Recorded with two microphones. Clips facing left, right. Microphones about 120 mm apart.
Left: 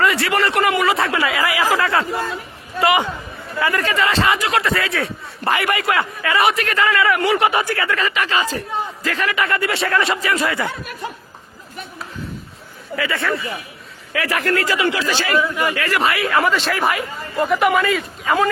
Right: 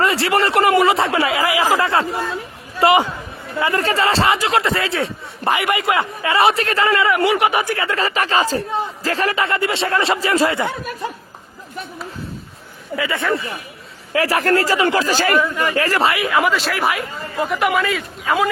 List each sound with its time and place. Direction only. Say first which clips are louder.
0.0 s a man's voice: right 1 dB; 25° right (ahead or behind)
13.0 s a man's voice: right 1 dB; 20° right (ahead or behind)
14.1 s speech: right 4 dB; 35° right (ahead or behind)
15.4 s speech: right 1 dB; 15° left (ahead or behind)
15.7 s speech: right 2 dB; 35° right (ahead or behind)
16.3 s speech: even; 5° right (ahead or behind)